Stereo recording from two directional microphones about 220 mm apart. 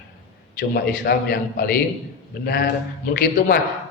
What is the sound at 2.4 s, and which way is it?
A man's voice, 45° left (ahead or behind).